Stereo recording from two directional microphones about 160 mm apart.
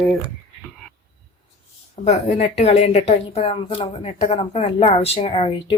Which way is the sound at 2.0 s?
45° left (ahead or behind).